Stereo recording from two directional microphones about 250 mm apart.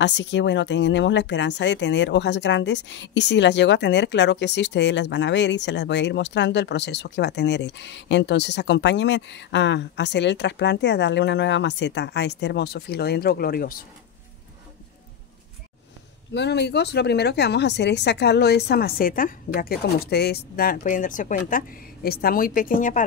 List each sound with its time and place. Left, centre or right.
0.0 s speech: left
16.3 s speech: left